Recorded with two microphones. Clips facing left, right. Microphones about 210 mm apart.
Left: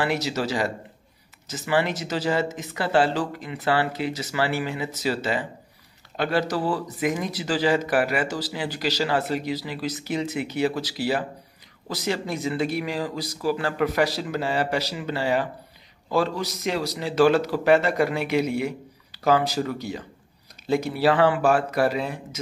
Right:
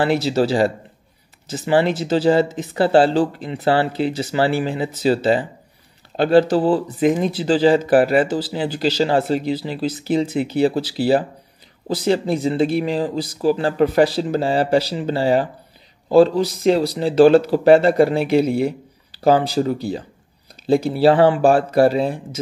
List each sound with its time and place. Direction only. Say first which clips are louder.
0.0 s speech: right 8 dB; 30° right (ahead or behind)